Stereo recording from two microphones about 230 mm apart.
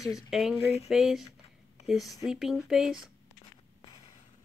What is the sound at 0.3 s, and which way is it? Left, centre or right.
Speech, centre.